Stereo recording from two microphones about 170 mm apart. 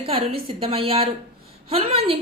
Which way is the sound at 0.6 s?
35° right (ahead or behind).